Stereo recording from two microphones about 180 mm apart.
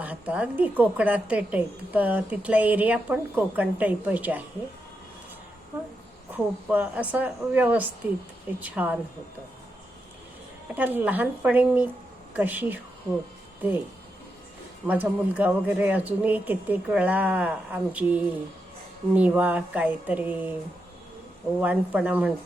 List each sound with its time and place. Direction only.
0.0 s a woman's voice: 5° right (ahead or behind)
6.3 s a woman's voice: 10° right (ahead or behind)
10.8 s a woman's voice: 10° right (ahead or behind)
14.8 s a woman's voice: 10° right (ahead or behind)
21.6 s a woman's voice: 10° right (ahead or behind)